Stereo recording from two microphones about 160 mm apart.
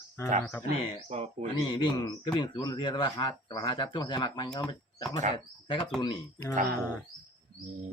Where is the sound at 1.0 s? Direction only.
45° right (ahead or behind).